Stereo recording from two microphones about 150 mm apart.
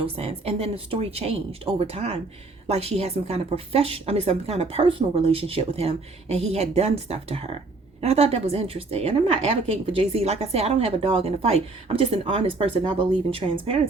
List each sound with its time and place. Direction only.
0.0 s a woman's voice: 40° right (ahead or behind)